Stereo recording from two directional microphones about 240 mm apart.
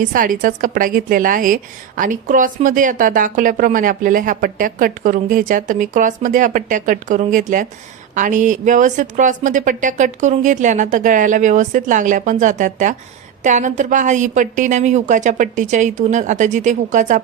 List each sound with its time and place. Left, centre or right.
0.0 s speech: right